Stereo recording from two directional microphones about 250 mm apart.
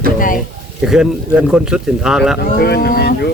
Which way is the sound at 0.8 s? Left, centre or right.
Centre.